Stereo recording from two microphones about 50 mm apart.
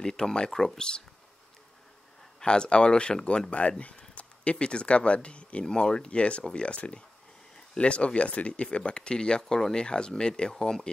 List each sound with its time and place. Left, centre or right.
0.0 s speech: centre
0.5 s speech: centre
0.7 s speech: centre
2.4 s speech: centre